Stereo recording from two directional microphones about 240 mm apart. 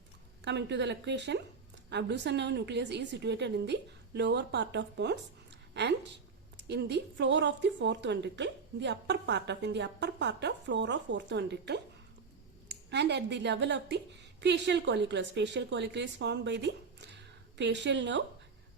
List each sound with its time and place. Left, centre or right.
0.4 s a woman's voice: right
12.9 s a woman's voice: right